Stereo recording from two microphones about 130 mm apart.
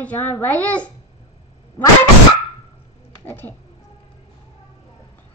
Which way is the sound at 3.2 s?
15° left (ahead or behind).